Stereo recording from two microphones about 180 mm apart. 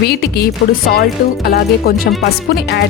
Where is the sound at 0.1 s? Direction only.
60° left (ahead or behind).